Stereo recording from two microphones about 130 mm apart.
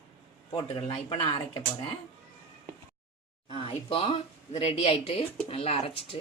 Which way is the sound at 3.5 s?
45° left (ahead or behind).